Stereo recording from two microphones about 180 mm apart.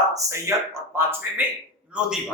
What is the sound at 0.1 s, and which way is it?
A man's voice, 15° right (ahead or behind).